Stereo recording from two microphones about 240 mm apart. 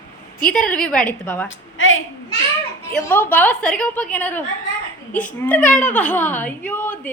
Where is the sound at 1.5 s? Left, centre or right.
Left.